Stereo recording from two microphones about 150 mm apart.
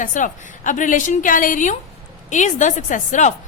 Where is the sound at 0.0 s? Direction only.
60° left (ahead or behind).